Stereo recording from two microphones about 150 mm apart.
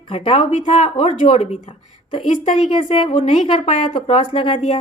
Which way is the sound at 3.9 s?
35° left (ahead or behind).